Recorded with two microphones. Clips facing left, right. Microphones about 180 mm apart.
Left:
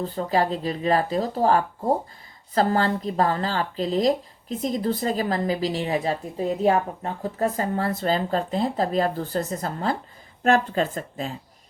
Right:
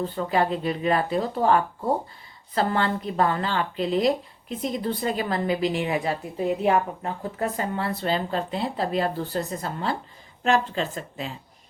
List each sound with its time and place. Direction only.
0.0 s speech: 35° left (ahead or behind)